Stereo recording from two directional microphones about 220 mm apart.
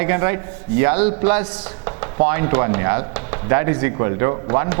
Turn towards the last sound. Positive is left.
turn(degrees=-15)  # may be behind; listen again after turning